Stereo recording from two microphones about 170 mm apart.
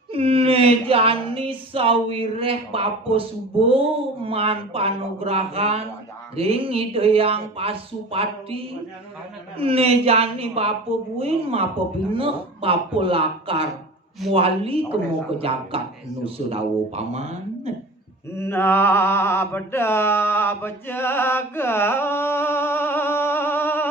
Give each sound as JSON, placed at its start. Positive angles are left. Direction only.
{"t": 0.1, "sound": "speech", "side_deg": -35}
{"t": 18.3, "sound": "mantra", "side_deg": 15}